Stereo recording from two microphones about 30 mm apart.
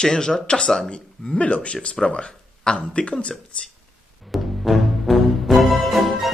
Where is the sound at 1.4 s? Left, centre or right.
Left.